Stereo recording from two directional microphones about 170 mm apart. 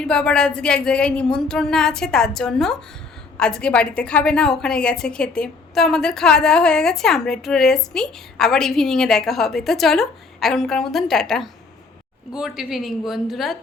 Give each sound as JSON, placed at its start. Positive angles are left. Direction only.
{"t": 0.1, "sound": "a woman's voice", "side_deg": 5}